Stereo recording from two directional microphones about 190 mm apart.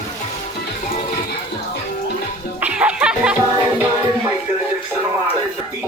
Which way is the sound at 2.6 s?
5° right (ahead or behind).